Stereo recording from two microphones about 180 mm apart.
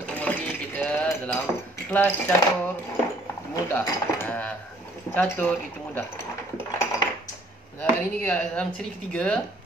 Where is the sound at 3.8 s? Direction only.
10° left (ahead or behind).